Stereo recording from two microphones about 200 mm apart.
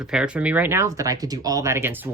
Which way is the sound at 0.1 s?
5° right (ahead or behind).